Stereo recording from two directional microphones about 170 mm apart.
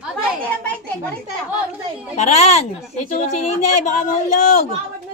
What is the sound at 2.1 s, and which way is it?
A woman's voice, 40° left (ahead or behind).